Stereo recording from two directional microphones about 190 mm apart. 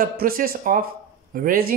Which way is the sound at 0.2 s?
50° right (ahead or behind).